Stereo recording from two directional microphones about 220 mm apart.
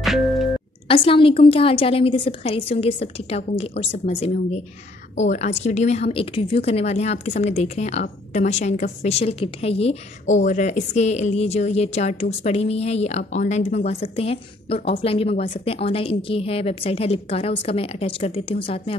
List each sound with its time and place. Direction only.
0.0 s music: centre (ahead or behind)
0.8 s a woman's voice: 25° left (ahead or behind)